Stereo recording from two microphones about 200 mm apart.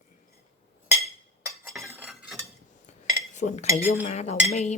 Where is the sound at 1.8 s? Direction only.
10° right (ahead or behind).